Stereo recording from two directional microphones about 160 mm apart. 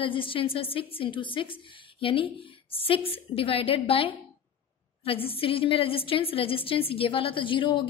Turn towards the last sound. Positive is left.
turn(degrees=30)  # may be behind; listen again after turning